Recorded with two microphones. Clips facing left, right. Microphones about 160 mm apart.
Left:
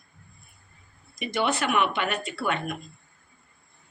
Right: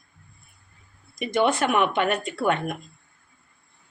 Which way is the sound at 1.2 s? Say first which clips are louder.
Right 5 dB; 50° right (ahead or behind).